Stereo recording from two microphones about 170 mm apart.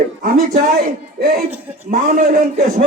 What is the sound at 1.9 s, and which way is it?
Speech, 55° right (ahead or behind).